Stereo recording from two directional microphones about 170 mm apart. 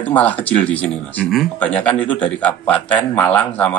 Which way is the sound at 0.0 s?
10° left (ahead or behind).